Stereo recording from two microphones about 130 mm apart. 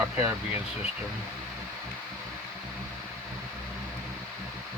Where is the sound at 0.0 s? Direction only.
15° right (ahead or behind).